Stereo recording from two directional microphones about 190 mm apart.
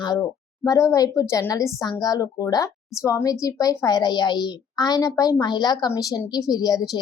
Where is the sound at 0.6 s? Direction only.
15° left (ahead or behind).